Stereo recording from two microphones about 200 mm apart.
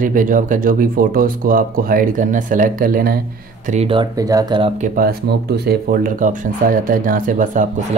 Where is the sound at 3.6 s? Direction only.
35° right (ahead or behind).